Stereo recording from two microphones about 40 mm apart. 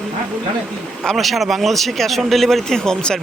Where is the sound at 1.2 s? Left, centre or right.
Centre.